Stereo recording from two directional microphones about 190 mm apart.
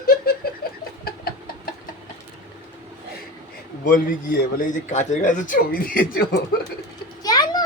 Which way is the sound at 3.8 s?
45° left (ahead or behind).